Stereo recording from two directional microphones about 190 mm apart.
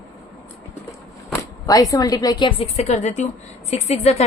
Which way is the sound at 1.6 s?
20° left (ahead or behind).